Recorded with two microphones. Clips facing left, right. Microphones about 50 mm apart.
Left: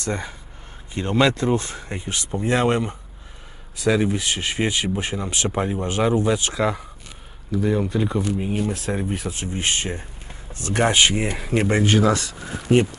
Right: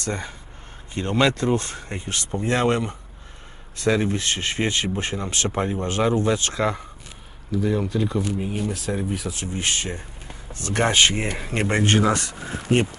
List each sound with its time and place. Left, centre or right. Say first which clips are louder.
0.0 s speech: left 2 dB; centre
5.8 s speech: left 1 dB; centre
9.1 s speech: left 1 dB; left
10.5 s a sound: left 1 dB; left
10.9 s speech: even; centre
11.3 s speech: left 3 dB; centre
12.1 s speech: left 1 dB; right
12.4 s speech: left 2 dB; right